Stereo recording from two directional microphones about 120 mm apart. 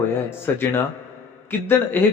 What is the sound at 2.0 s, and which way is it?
Speech, 15° left (ahead or behind).